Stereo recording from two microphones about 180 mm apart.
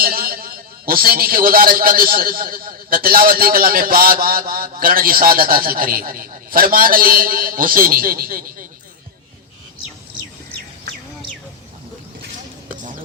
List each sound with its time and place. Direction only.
0.0 s a man's voice: 55° right (ahead or behind)